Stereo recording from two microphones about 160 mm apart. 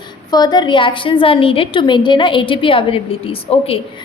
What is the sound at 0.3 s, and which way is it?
A woman's voice, 25° left (ahead or behind).